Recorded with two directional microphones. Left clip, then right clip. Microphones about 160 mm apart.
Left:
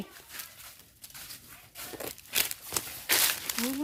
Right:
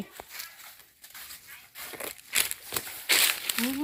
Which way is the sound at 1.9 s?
45° left (ahead or behind).